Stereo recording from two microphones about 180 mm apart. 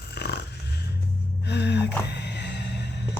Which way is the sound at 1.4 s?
70° left (ahead or behind).